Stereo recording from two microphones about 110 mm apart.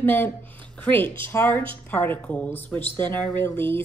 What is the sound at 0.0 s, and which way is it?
A woman's voice, 15° left (ahead or behind).